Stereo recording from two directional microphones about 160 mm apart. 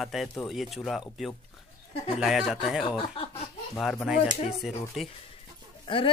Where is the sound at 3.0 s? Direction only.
35° left (ahead or behind).